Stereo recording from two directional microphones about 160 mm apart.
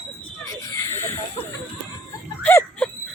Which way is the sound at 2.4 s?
10° left (ahead or behind).